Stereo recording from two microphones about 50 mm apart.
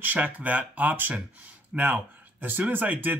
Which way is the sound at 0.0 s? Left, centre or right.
Right.